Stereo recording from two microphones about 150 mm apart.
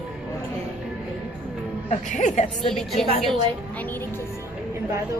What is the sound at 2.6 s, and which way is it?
A woman's voice, centre (ahead or behind).